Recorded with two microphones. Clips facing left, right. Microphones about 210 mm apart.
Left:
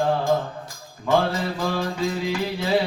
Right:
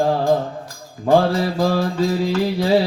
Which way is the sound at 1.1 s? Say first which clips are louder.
Right 6 dB; 35° right (ahead or behind).